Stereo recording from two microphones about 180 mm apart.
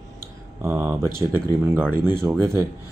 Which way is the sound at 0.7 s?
10° right (ahead or behind).